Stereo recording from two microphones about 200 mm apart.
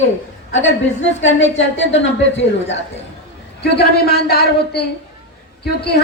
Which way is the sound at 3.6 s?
55° left (ahead or behind).